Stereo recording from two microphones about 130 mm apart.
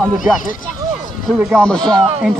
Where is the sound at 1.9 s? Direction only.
45° right (ahead or behind).